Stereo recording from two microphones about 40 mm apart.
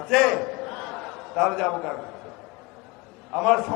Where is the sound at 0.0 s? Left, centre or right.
Centre.